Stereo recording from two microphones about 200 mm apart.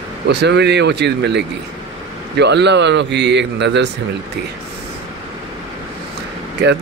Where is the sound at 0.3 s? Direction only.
60° right (ahead or behind).